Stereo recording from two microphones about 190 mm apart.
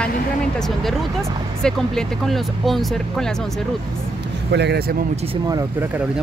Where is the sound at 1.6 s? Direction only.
Centre (ahead or behind).